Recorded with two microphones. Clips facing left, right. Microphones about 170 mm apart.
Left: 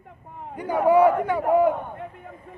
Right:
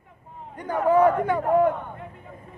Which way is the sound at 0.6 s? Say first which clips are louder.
Left 2 dB; 10° left (ahead or behind).